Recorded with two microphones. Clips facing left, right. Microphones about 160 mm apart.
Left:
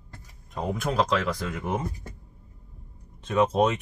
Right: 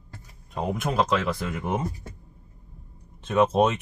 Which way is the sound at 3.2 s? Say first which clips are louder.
Right 2 dB; 25° right (ahead or behind).